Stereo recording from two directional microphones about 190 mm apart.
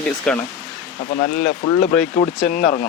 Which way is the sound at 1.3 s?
50° left (ahead or behind).